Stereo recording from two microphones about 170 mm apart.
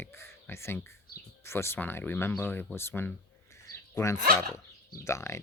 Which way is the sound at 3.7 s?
15° left (ahead or behind).